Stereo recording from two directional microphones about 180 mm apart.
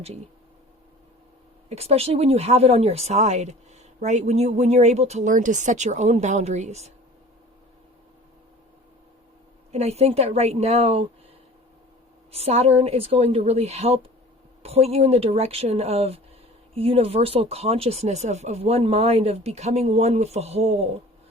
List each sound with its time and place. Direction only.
1.7 s speech: 35° right (ahead or behind)
9.7 s speech: 35° right (ahead or behind)
12.3 s speech: 35° right (ahead or behind)